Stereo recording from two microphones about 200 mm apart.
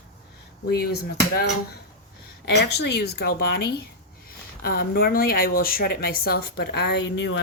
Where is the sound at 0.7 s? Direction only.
50° left (ahead or behind).